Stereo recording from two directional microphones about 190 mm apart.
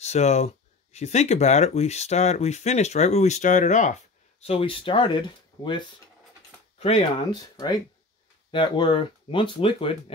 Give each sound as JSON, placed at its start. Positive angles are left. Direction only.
{"t": 0.0, "sound": "speech", "side_deg": 35}
{"t": 4.4, "sound": "speech", "side_deg": 30}
{"t": 7.5, "sound": "speech", "side_deg": 20}